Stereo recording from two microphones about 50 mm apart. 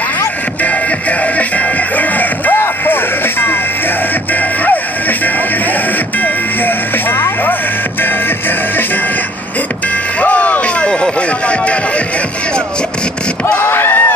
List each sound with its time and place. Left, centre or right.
1.2 s music: left
6.2 s music: left
10.2 s music: left
13.6 s a sound: left